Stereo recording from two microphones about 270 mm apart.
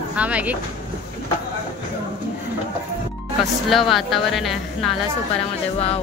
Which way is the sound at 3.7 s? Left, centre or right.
Centre.